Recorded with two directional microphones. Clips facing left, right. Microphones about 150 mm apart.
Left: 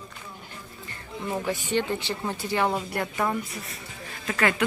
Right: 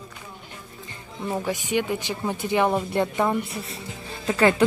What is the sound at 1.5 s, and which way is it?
A woman's voice, 10° right (ahead or behind).